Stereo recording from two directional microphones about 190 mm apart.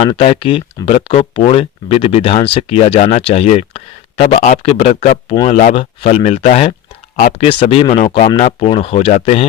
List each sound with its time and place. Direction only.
0.0 s speech: 30° left (ahead or behind)
5.3 s speech: 20° left (ahead or behind)